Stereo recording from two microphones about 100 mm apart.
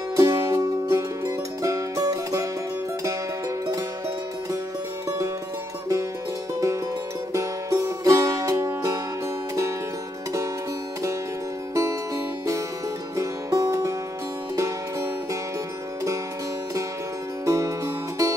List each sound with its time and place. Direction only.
0.1 s music: 35° right (ahead or behind)
7.3 s music: 35° right (ahead or behind)
11.7 s music: 35° right (ahead or behind)
13.1 s music: 35° right (ahead or behind)
17.5 s music: 35° right (ahead or behind)